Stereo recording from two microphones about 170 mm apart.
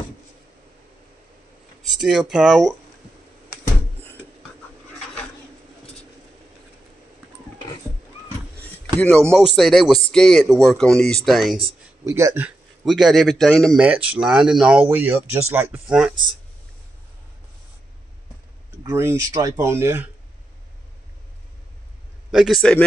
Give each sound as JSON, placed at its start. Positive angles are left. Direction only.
{"t": 1.9, "sound": "a man's voice", "side_deg": 0}
{"t": 8.5, "sound": "a sound", "side_deg": 5}
{"t": 9.6, "sound": "a man's voice", "side_deg": 0}
{"t": 12.0, "sound": "a man's voice", "side_deg": -20}
{"t": 18.8, "sound": "speech", "side_deg": -20}
{"t": 22.3, "sound": "a man's voice", "side_deg": 0}